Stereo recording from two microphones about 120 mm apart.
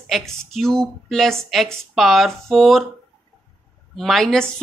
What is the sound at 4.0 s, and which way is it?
Speech, centre (ahead or behind).